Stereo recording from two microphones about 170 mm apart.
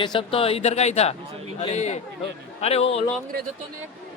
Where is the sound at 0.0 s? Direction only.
30° left (ahead or behind).